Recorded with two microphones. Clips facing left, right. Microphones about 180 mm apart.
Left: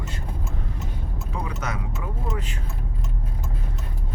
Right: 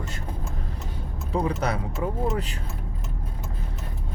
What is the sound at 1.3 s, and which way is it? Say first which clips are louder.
Speech: right 7 dB; 35° right (ahead or behind).